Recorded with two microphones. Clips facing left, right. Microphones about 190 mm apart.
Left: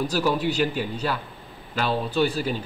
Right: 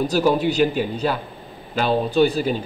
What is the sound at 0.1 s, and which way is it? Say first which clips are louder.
A man's voice: right 5 dB; 20° right (ahead or behind).